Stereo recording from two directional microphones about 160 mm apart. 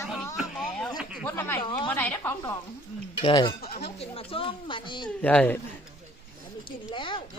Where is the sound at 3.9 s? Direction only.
35° left (ahead or behind).